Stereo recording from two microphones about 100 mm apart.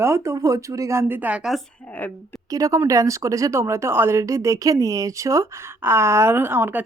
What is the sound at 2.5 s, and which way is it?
Speech, 35° right (ahead or behind).